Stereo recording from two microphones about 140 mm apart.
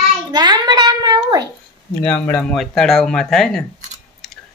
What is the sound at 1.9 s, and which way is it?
Speech, 15° left (ahead or behind).